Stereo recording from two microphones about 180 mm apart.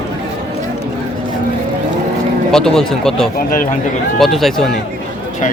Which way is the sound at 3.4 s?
50° left (ahead or behind).